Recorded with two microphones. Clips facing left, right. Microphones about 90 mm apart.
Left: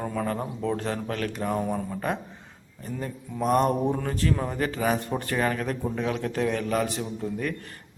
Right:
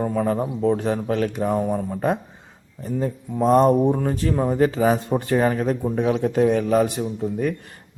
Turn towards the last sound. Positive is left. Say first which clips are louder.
# right 6 dB
turn(degrees=-15)  # may be behind; listen again after turning